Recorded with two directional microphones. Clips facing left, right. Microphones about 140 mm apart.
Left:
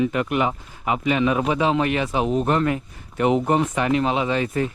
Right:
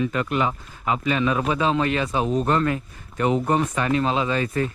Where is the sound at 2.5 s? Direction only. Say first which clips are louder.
Left 1 dB; 20° left (ahead or behind).